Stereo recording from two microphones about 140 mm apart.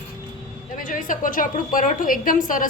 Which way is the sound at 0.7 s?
75° left (ahead or behind).